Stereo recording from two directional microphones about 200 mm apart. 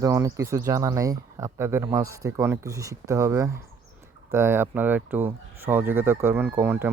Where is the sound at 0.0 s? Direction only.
15° right (ahead or behind).